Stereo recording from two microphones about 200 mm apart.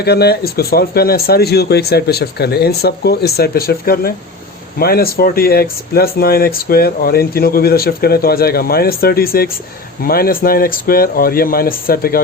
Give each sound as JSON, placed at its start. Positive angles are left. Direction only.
{"t": 0.0, "sound": "speech", "side_deg": 55}